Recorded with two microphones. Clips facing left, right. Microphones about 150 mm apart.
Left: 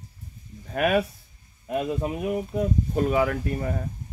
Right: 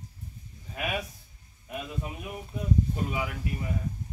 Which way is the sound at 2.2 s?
90° left.